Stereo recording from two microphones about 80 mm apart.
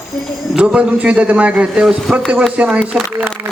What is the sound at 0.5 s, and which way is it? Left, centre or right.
A man's voice, centre.